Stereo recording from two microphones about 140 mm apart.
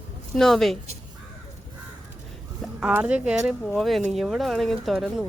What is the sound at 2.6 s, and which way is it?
Speech, 5° right (ahead or behind).